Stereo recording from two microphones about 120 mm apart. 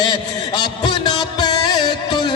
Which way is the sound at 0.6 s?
40° left (ahead or behind).